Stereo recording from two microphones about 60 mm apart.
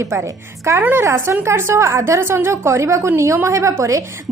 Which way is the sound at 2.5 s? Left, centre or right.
Right.